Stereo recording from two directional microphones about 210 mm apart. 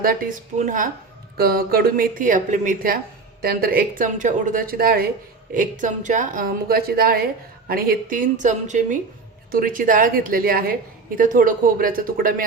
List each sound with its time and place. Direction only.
0.0 s a woman's voice: 40° right (ahead or behind)